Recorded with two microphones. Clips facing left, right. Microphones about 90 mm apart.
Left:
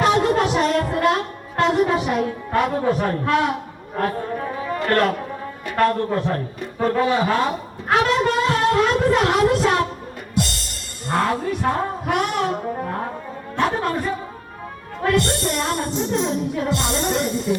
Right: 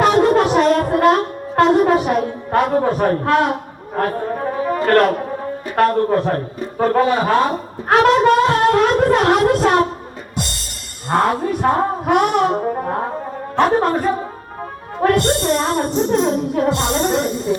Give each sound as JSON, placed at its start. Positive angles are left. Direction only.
{"t": 0.0, "sound": "music", "side_deg": -45}
{"t": 5.7, "sound": "a man's voice", "side_deg": -40}
{"t": 11.1, "sound": "music", "side_deg": -40}
{"t": 13.6, "sound": "a man's voice", "side_deg": -45}
{"t": 15.0, "sound": "music", "side_deg": -40}